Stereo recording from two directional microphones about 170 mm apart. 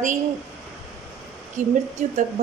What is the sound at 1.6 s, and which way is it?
Speech, 45° right (ahead or behind).